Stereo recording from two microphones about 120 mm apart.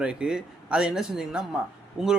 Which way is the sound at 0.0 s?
5° right (ahead or behind).